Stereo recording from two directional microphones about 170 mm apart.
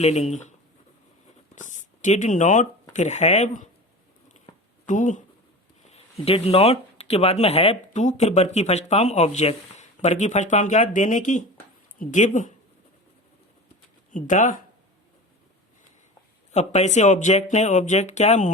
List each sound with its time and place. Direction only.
0.0 s speech: 40° left (ahead or behind)
1.5 s speech: 45° left (ahead or behind)
4.4 s a sound: 45° left (ahead or behind)
5.9 s speech: 35° left (ahead or behind)
14.1 s speech: 50° left (ahead or behind)
16.5 s speech: 40° left (ahead or behind)